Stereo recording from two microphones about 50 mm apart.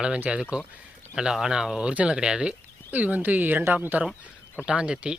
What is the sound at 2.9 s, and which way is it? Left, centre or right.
Speech, right.